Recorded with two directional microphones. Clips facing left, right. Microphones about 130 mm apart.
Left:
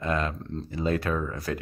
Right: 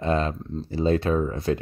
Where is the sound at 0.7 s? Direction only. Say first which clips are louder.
Right 5 dB; 30° right (ahead or behind).